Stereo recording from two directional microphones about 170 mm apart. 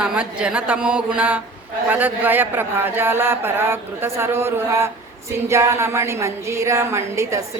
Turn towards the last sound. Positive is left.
turn(degrees=-15)  # may be behind; listen again after turning